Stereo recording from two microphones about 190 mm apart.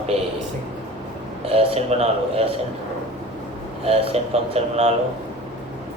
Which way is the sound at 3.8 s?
30° right (ahead or behind).